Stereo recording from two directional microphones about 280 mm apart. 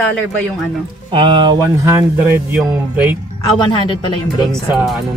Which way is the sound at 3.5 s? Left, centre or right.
Centre.